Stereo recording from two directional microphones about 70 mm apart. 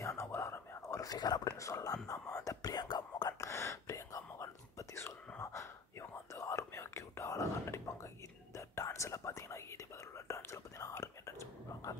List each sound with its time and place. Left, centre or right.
0.0 s whispering: left
1.0 s speech: left
1.6 s whispering: left
3.3 s whispering: left